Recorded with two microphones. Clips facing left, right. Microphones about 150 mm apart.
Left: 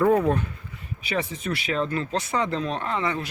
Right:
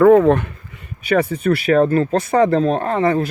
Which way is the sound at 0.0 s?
90° right.